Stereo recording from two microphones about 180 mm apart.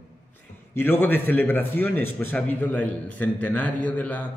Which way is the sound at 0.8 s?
10° left (ahead or behind).